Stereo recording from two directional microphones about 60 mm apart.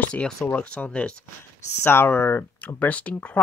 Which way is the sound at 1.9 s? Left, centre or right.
Left.